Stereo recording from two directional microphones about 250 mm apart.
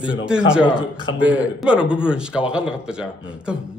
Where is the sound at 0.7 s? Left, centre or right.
Centre.